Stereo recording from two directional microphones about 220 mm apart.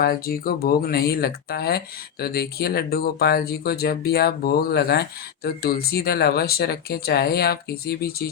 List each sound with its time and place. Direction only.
0.0 s speech: 40° left (ahead or behind)